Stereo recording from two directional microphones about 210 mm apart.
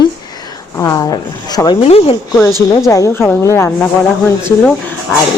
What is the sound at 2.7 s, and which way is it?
Speech, 15° left (ahead or behind).